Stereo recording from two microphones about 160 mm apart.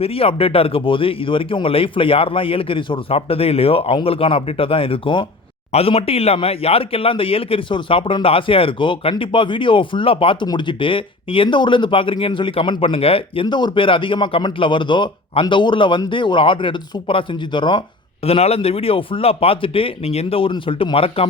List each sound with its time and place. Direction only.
0.0 s speech: 35° left (ahead or behind)